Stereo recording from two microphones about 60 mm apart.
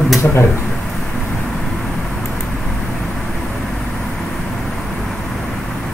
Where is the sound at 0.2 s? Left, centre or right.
Left.